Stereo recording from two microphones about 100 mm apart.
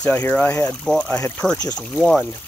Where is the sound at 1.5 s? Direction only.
40° left (ahead or behind).